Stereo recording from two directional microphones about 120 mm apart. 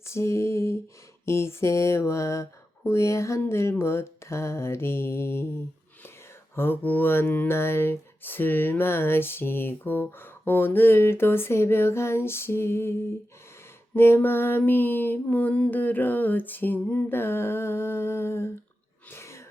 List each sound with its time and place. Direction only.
0.0 s speech: 20° left (ahead or behind)
6.6 s speech: 15° left (ahead or behind)
13.9 s mantra: 20° left (ahead or behind)
19.1 s a sound: 25° left (ahead or behind)